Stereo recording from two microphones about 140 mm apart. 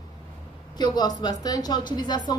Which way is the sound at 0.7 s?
30° left (ahead or behind).